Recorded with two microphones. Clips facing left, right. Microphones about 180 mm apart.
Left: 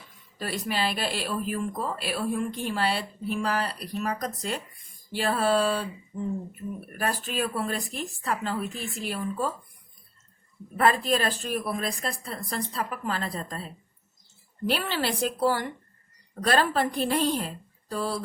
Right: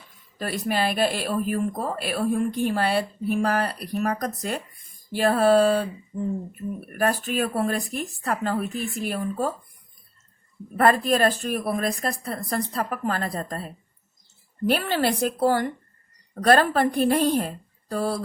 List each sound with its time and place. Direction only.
0.3 s speech: 50° right (ahead or behind)
6.9 s speech: 50° right (ahead or behind)
10.8 s speech: 50° right (ahead or behind)